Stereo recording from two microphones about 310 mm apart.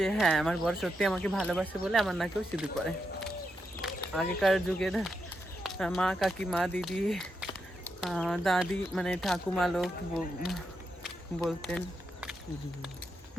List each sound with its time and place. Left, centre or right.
0.0 s speech: centre